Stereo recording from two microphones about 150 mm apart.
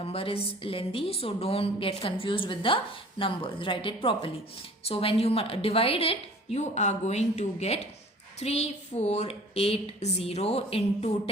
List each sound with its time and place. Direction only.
0.0 s a woman's voice: 40° left (ahead or behind)